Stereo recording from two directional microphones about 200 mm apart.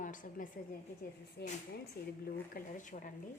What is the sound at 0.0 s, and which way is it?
Speech, 40° left (ahead or behind).